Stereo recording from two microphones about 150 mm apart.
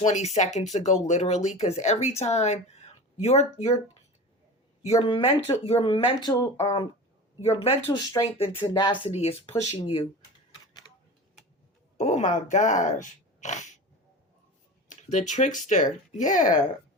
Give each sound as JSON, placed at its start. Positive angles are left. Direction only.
{"t": 0.0, "sound": "speech", "side_deg": 50}
{"t": 4.9, "sound": "speech", "side_deg": 35}
{"t": 7.4, "sound": "speech", "side_deg": 40}
{"t": 8.1, "sound": "speech", "side_deg": 25}
{"t": 11.9, "sound": "speech", "side_deg": 50}
{"t": 14.8, "sound": "speech", "side_deg": 55}